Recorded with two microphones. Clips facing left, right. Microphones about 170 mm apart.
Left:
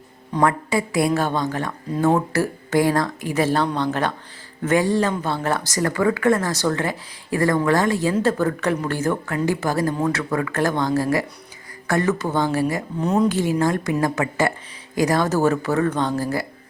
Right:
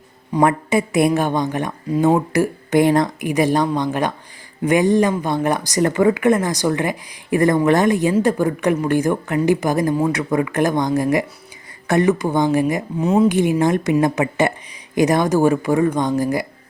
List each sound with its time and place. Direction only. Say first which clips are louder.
0.3 s a woman's voice: right 3 dB; 20° right (ahead or behind)
13.0 s speech: right 4 dB; 5° right (ahead or behind)
13.2 s a woman's voice: right 4 dB; 15° right (ahead or behind)